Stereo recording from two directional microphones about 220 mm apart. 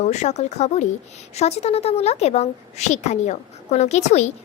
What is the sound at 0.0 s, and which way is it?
A woman's voice, 30° left (ahead or behind).